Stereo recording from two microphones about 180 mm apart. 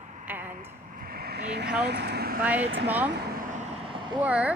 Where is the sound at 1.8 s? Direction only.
65° right (ahead or behind).